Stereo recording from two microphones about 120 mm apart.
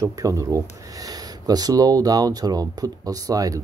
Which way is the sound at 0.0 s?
25° right (ahead or behind).